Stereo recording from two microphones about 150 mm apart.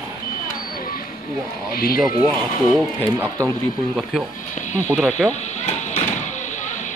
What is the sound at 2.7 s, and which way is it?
Speech, 5° right (ahead or behind).